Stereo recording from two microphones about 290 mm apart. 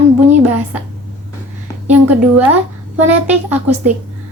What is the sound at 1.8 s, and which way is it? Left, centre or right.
A woman's voice, centre.